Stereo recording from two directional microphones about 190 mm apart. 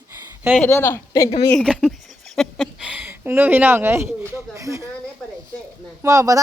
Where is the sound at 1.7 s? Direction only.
5° right (ahead or behind).